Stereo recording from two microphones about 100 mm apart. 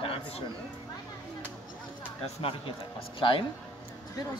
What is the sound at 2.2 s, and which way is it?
Speech, 70° left (ahead or behind).